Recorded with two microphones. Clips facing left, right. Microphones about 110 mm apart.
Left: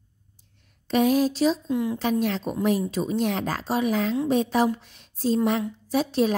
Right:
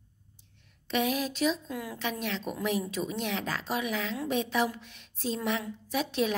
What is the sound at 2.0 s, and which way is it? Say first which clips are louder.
A woman's voice: left 9 dB; 40° left (ahead or behind).